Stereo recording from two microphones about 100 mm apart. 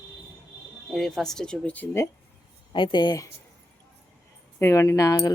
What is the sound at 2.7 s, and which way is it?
Speech, 55° left (ahead or behind).